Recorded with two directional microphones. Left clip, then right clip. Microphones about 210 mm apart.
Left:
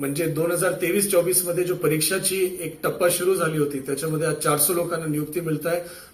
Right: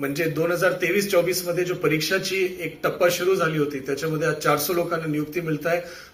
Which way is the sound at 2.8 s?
50° left (ahead or behind).